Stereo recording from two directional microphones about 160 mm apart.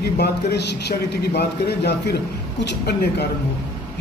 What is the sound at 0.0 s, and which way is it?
A man's voice, 85° left.